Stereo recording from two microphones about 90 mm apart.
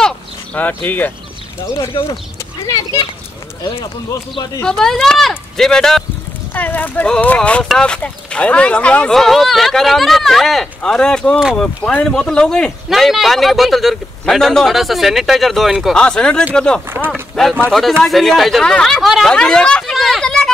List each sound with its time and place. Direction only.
0.6 s speech: 20° left (ahead or behind)
1.8 s speech: 80° left
2.6 s a child's voice: 35° left (ahead or behind)
4.6 s a man's voice: 5° left (ahead or behind)
6.5 s a man's voice: 20° left (ahead or behind); by 16.0 s centre (ahead or behind)
16.0 s a man's voice: 10° left (ahead or behind)